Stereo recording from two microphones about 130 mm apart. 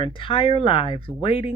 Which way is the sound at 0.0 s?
40° left (ahead or behind).